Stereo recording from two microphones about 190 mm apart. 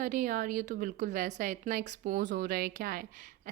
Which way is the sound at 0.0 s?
45° right (ahead or behind).